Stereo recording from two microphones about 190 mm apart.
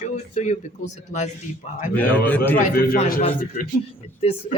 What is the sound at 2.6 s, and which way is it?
Speech, 45° left (ahead or behind).